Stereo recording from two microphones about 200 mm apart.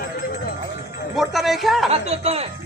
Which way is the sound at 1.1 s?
Centre (ahead or behind).